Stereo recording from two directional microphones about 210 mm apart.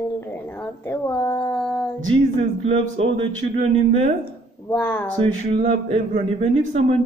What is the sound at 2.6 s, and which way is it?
Speech, 30° right (ahead or behind).